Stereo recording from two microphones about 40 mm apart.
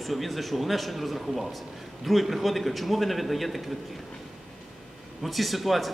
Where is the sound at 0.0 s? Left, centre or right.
Centre.